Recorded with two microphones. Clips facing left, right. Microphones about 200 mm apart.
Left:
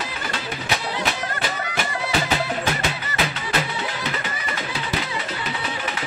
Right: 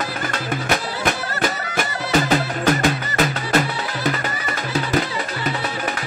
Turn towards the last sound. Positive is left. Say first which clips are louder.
# right 5 dB
turn(degrees=-45)  # may be behind; listen again after turning